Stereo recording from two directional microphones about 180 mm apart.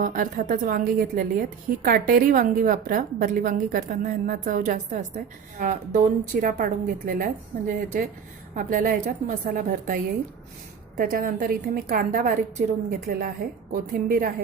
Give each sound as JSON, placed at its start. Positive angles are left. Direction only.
{"t": 0.0, "sound": "a woman's voice", "side_deg": -50}
{"t": 8.5, "sound": "a woman's voice", "side_deg": -50}